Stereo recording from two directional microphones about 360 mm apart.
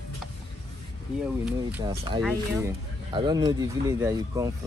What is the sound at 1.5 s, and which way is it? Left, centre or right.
Speech, centre.